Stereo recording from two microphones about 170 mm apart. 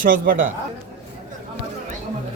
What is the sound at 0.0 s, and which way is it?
Speech, 55° right (ahead or behind).